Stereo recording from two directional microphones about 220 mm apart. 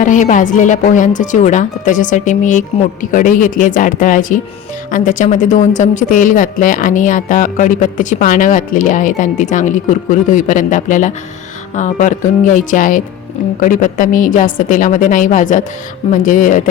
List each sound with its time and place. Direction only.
0.0 s speech: 35° left (ahead or behind)